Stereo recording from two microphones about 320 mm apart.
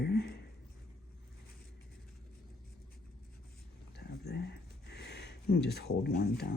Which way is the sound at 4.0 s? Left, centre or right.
Left.